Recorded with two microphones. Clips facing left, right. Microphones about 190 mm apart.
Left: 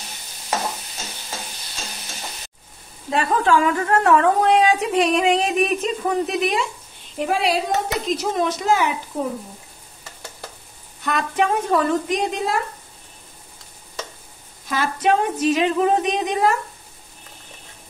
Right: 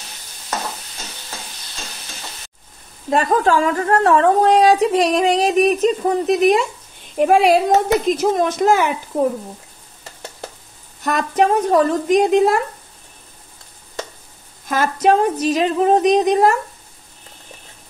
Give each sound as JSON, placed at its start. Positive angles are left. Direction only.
{"t": 3.1, "sound": "a woman's voice", "side_deg": -40}
{"t": 7.2, "sound": "a woman's voice", "side_deg": -55}
{"t": 11.0, "sound": "a woman's voice", "side_deg": -40}
{"t": 14.7, "sound": "a woman's voice", "side_deg": -45}